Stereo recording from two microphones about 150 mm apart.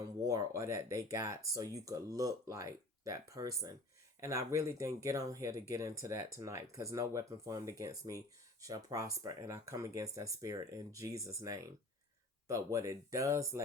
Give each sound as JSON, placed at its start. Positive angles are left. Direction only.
{"t": 0.0, "sound": "speech", "side_deg": -20}